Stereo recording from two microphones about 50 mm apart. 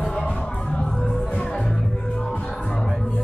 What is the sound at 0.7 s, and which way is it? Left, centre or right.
Music, centre.